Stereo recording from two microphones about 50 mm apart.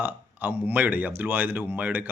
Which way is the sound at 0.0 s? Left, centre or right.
Right.